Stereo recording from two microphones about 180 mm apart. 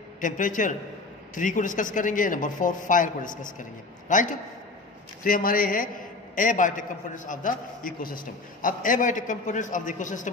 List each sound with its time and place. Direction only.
0.2 s speech: 45° left (ahead or behind)